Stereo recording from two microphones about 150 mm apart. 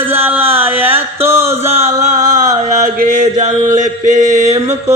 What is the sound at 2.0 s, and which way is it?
Chant, 50° right (ahead or behind).